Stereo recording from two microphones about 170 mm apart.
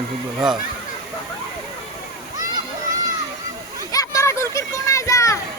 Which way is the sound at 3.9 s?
20° left (ahead or behind).